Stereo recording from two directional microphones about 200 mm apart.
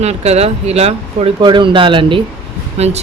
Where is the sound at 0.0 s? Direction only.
30° right (ahead or behind).